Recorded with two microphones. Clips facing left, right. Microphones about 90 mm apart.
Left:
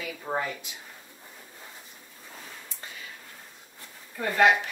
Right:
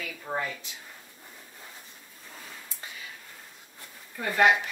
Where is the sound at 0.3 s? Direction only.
15° left (ahead or behind).